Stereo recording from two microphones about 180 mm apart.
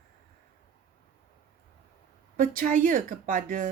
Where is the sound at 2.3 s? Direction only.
50° right (ahead or behind).